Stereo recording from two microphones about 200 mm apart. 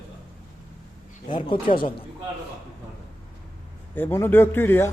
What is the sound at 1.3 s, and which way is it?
Speech, 25° left (ahead or behind).